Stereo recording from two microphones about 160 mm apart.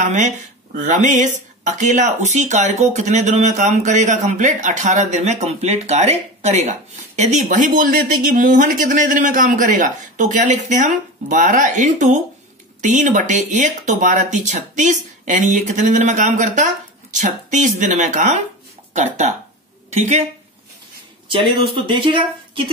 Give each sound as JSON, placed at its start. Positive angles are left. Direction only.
{"t": 0.0, "sound": "speech", "side_deg": -50}
{"t": 21.8, "sound": "speech", "side_deg": -30}